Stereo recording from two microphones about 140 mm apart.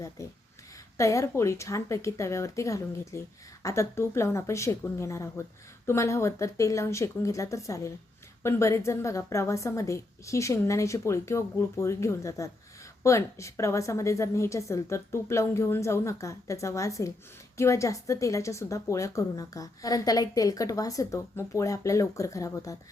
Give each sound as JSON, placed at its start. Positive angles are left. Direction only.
{"t": 0.2, "sound": "a woman's voice", "side_deg": 20}